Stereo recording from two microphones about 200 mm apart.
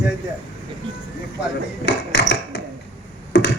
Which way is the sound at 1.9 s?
60° left (ahead or behind).